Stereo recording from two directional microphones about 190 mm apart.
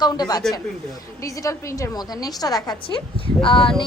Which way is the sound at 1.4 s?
20° left (ahead or behind).